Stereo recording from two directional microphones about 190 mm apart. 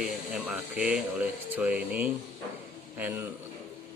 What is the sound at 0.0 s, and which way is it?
Speech, 5° right (ahead or behind).